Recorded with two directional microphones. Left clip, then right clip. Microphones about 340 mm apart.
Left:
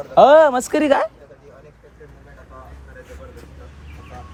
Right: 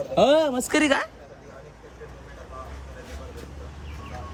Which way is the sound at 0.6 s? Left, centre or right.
Centre.